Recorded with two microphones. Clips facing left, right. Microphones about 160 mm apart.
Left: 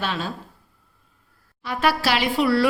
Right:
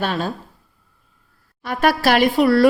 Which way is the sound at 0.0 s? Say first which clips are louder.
Right 5 dB; 45° right (ahead or behind).